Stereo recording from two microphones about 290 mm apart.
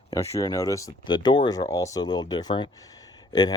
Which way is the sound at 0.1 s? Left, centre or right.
Centre.